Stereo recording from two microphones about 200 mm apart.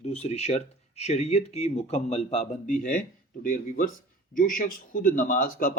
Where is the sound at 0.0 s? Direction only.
30° left (ahead or behind).